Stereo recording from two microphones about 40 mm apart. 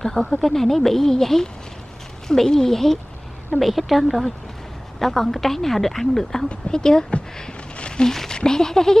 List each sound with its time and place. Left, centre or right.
0.0 s a woman's voice: centre
7.3 s a sound: centre
8.4 s speech: centre